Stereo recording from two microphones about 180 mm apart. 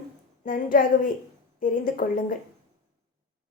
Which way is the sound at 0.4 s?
50° left (ahead or behind).